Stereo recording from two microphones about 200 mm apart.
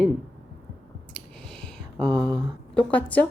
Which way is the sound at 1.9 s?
25° right (ahead or behind).